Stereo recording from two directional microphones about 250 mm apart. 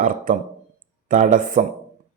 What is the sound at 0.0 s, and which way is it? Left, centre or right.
A man's voice, right.